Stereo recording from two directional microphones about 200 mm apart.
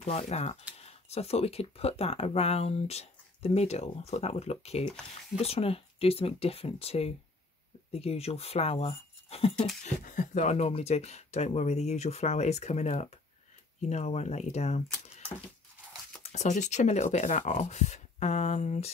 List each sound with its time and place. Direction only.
0.0 s speech: 35° left (ahead or behind)
4.8 s speech: 5° left (ahead or behind)
5.4 s speech: 30° left (ahead or behind)
16.2 s speech: 35° left (ahead or behind)